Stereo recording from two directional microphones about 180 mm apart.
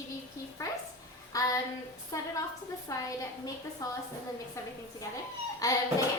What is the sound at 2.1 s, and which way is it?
A woman's voice, 15° left (ahead or behind).